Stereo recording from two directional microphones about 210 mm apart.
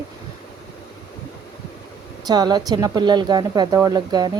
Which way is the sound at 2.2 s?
20° right (ahead or behind).